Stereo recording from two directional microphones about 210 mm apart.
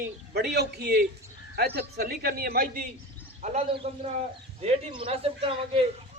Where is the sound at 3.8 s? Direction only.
30° right (ahead or behind).